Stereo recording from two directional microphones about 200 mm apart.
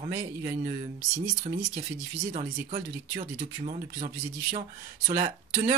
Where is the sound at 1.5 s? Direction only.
35° right (ahead or behind).